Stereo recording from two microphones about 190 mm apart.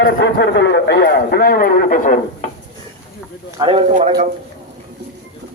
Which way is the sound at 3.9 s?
45° right (ahead or behind).